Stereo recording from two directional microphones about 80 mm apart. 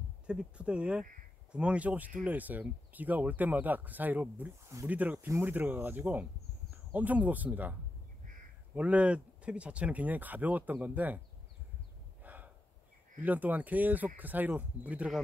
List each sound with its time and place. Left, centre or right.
0.3 s speech: centre
8.7 s speech: centre
12.2 s snort: right
13.2 s speech: right